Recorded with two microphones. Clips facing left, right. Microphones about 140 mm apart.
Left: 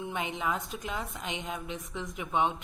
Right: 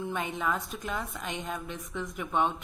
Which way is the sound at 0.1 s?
20° left (ahead or behind).